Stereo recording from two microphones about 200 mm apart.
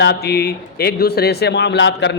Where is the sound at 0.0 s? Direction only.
55° left (ahead or behind).